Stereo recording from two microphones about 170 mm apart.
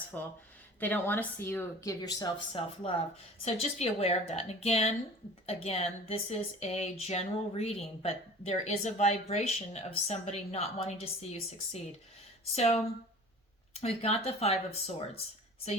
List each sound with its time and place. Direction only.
0.1 s a woman's voice: 10° left (ahead or behind); by 15.2 s 35° left (ahead or behind)